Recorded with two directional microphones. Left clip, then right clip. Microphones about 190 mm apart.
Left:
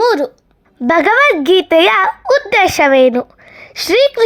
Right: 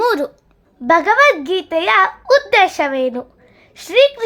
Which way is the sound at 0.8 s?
25° left (ahead or behind).